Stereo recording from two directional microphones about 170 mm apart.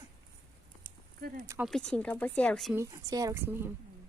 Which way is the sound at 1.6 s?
5° left (ahead or behind).